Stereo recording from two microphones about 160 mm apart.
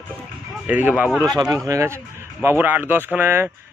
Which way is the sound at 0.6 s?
10° right (ahead or behind).